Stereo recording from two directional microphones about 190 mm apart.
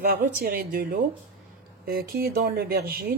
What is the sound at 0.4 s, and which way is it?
Speech, 50° right (ahead or behind).